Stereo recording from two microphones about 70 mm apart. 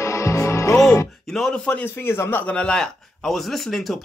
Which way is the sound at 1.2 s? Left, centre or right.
Centre.